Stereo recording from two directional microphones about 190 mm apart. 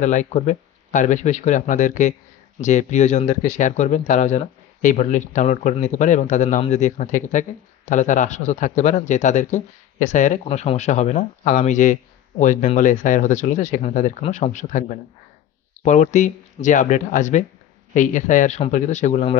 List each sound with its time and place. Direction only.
0.0 s a man's voice: 40° left (ahead or behind)